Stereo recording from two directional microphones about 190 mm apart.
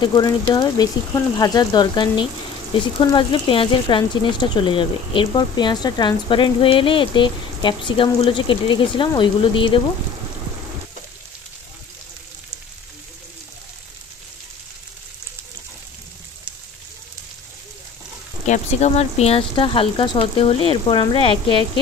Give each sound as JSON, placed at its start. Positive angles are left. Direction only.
{"t": 0.0, "sound": "speech", "side_deg": 25}
{"t": 18.5, "sound": "speech", "side_deg": 35}